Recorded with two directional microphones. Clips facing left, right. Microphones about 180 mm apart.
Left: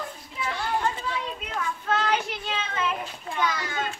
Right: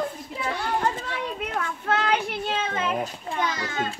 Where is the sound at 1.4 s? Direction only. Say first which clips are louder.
Right 2 dB; 60° right (ahead or behind).